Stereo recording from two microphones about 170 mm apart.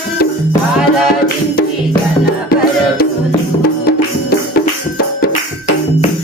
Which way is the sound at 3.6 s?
60° left (ahead or behind).